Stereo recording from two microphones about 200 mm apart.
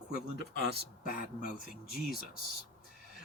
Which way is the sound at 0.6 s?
55° right (ahead or behind).